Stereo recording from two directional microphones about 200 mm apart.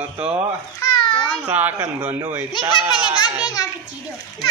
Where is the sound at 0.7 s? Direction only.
20° left (ahead or behind).